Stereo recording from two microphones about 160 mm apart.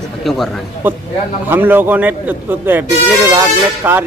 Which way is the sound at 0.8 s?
10° right (ahead or behind).